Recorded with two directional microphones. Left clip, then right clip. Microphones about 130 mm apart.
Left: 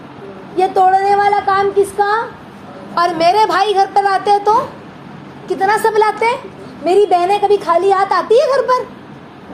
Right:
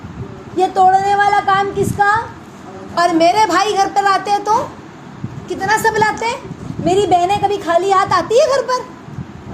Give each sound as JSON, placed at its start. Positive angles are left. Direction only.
{"t": 0.5, "sound": "a woman's voice", "side_deg": 10}
{"t": 2.9, "sound": "a woman's voice", "side_deg": 15}